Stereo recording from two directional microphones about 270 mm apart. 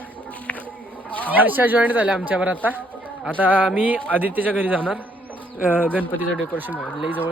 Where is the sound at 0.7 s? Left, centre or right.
Centre.